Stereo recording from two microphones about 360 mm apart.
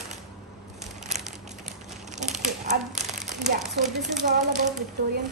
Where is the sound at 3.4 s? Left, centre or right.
Centre.